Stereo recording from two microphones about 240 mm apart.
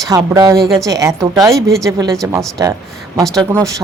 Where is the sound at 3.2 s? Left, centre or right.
Centre.